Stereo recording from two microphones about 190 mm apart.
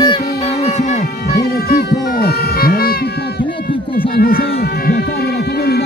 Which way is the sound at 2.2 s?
50° left (ahead or behind).